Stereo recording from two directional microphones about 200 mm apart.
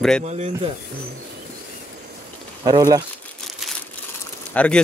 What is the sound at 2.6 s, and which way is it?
Speech, 20° right (ahead or behind).